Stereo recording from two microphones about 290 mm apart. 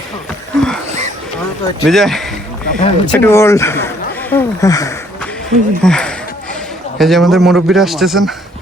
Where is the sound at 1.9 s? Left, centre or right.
Centre.